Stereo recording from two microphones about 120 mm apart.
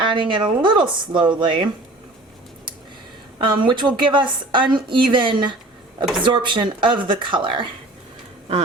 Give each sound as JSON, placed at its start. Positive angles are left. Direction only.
{"t": 0.0, "sound": "speech", "side_deg": -40}
{"t": 3.3, "sound": "a woman's voice", "side_deg": -40}